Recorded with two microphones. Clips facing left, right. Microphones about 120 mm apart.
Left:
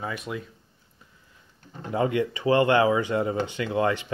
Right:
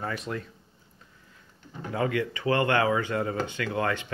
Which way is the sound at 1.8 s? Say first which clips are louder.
Left 3 dB; 25° left (ahead or behind).